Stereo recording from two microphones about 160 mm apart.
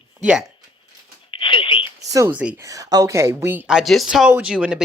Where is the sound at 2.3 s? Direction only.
10° right (ahead or behind).